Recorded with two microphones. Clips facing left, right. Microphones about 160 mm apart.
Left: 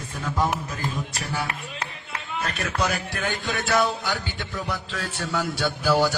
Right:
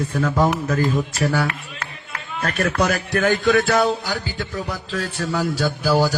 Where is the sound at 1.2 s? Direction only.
85° right.